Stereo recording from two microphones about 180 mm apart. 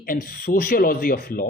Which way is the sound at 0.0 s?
55° left (ahead or behind).